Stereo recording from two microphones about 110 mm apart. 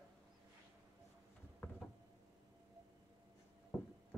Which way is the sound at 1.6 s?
15° left (ahead or behind).